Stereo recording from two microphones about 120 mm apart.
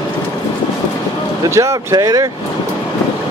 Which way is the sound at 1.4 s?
25° right (ahead or behind).